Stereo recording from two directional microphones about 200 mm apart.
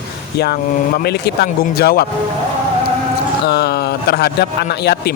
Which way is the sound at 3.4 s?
55° left (ahead or behind).